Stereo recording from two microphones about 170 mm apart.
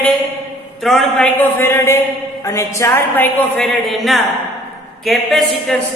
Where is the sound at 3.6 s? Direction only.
Centre (ahead or behind).